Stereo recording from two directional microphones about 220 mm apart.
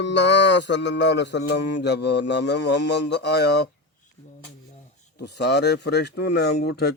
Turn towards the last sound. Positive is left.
turn(degrees=50)  # may be behind; listen again after turning